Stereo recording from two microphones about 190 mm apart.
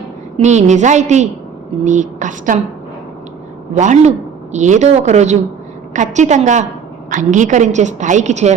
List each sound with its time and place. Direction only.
0.3 s a woman's voice: 40° right (ahead or behind)
3.8 s a woman's voice: 40° right (ahead or behind)